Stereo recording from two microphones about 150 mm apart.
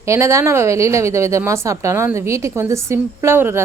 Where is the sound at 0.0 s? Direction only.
20° right (ahead or behind).